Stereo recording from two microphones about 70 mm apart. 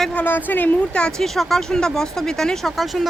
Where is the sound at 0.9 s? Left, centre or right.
Centre.